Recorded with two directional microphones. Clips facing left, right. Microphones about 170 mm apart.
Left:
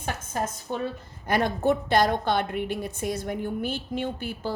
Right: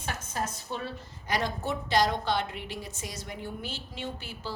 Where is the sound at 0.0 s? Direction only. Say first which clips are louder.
Left 4 dB; 50° left (ahead or behind).